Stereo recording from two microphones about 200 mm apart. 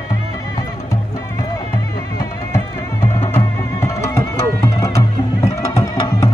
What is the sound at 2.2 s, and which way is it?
Music, 15° left (ahead or behind).